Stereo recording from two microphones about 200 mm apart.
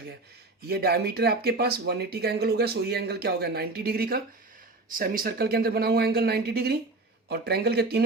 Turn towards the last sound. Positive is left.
turn(degrees=-55)  # may be behind; listen again after turning